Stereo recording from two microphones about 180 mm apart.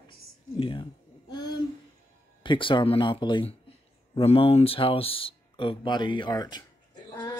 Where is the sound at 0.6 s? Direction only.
30° left (ahead or behind).